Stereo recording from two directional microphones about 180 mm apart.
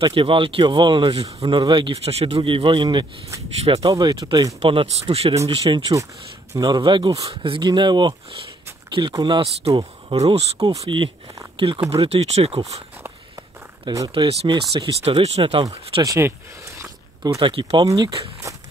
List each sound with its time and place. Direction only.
0.0 s speech: 30° right (ahead or behind)
4.6 s speech: 30° right (ahead or behind)
5.6 s speech: 25° right (ahead or behind)
10.8 s speech: 25° right (ahead or behind)
13.8 s speech: 20° right (ahead or behind)
16.0 s speech: 15° right (ahead or behind)